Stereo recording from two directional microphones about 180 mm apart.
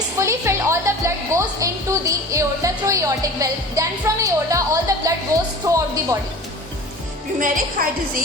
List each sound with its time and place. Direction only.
0.2 s a woman's voice: 15° right (ahead or behind)
7.3 s a woman's voice: 50° right (ahead or behind)